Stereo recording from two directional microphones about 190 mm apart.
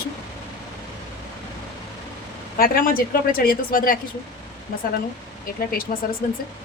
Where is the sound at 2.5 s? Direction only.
50° left (ahead or behind).